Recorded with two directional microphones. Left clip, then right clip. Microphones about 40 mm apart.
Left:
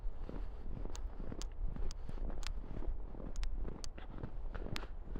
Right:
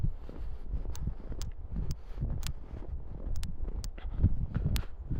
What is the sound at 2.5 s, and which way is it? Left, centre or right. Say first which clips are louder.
Wind noise: right 3 dB; right.